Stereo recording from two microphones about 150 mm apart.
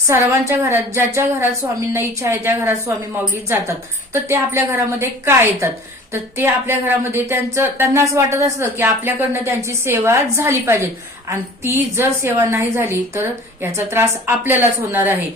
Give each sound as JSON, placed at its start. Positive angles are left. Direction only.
{"t": 0.1, "sound": "speech", "side_deg": -15}